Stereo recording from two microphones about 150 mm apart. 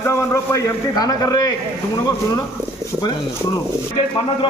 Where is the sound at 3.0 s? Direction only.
30° left (ahead or behind).